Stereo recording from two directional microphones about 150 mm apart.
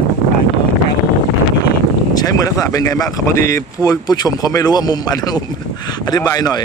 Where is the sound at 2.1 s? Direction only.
25° left (ahead or behind).